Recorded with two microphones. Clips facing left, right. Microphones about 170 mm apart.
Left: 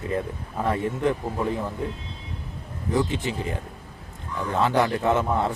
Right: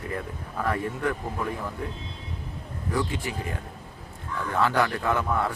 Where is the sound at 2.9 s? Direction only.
20° left (ahead or behind).